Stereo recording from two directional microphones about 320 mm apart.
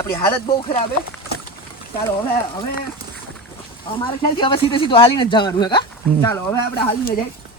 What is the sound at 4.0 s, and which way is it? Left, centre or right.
Speech, centre.